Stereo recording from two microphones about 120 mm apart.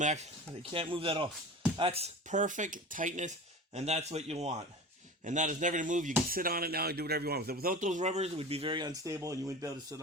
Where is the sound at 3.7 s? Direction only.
65° right (ahead or behind).